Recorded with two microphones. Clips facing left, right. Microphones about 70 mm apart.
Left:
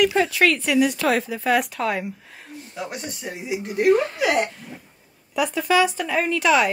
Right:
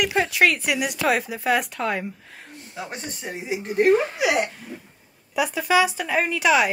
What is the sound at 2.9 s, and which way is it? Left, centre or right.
Speech, right.